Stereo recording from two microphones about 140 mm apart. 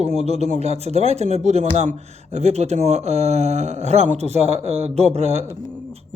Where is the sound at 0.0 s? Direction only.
50° right (ahead or behind).